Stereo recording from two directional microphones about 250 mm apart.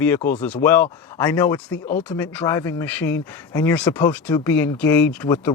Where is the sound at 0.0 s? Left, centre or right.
Centre.